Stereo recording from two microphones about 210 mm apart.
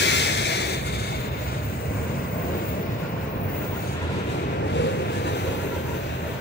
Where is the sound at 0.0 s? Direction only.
55° left (ahead or behind).